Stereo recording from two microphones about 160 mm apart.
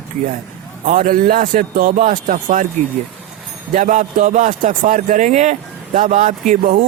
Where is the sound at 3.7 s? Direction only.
50° right (ahead or behind).